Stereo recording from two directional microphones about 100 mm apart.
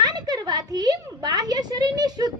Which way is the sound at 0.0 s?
45° right (ahead or behind).